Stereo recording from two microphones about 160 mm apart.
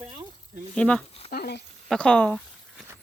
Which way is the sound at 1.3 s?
85° left.